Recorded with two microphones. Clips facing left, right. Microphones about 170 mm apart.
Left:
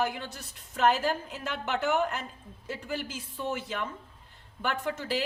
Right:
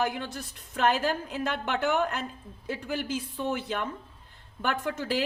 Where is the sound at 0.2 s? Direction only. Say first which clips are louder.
Right 4 dB; 55° right (ahead or behind).